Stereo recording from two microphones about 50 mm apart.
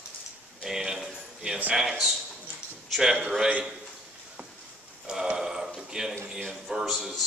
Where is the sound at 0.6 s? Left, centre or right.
Centre.